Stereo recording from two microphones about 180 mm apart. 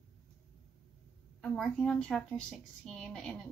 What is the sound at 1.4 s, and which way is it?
Speech, 5° left (ahead or behind).